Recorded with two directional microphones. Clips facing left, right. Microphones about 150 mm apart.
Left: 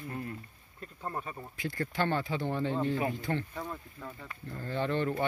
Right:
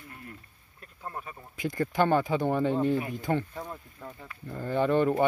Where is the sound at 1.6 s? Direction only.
20° right (ahead or behind).